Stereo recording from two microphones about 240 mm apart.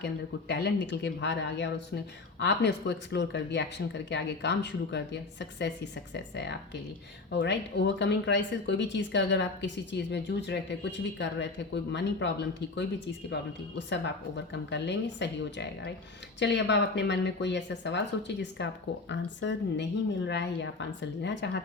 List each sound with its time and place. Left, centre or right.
0.0 s speech: left
14.7 s speech: left